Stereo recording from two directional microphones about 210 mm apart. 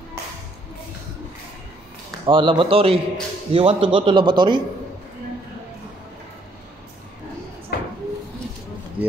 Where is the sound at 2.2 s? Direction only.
25° right (ahead or behind).